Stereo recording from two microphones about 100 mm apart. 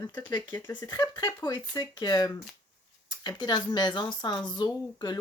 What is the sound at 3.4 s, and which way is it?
Speech, 45° left (ahead or behind).